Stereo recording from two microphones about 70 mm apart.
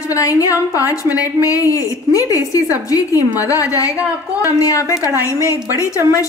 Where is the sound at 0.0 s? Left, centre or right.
Left.